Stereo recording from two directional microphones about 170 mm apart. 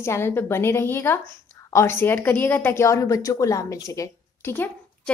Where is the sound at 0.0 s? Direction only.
15° left (ahead or behind).